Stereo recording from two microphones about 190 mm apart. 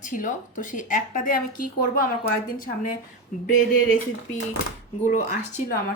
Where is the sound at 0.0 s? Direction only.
45° left (ahead or behind).